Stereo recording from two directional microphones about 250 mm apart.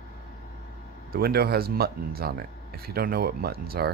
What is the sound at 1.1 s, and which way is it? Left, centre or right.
Speech, right.